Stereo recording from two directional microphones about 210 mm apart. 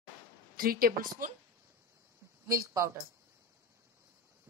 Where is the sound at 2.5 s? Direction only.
15° right (ahead or behind).